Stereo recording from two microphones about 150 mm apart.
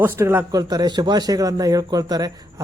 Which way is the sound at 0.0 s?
15° right (ahead or behind).